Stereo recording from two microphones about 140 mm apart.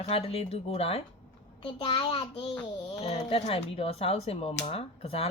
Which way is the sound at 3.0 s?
45° left (ahead or behind).